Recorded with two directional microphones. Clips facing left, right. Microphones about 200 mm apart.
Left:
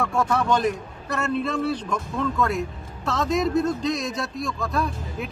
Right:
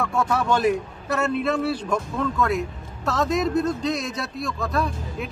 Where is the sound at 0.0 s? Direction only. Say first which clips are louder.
Even; centre (ahead or behind).